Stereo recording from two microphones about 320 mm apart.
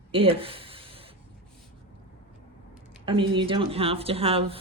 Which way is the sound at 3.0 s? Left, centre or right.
Centre.